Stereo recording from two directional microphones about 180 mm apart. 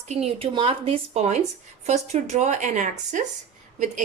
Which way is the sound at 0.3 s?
30° right (ahead or behind).